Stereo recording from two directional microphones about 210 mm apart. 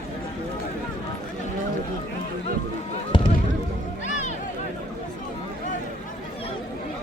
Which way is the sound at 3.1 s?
25° left (ahead or behind).